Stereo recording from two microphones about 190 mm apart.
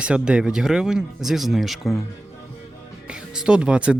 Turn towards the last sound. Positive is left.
turn(degrees=-5)  # may be behind; listen again after turning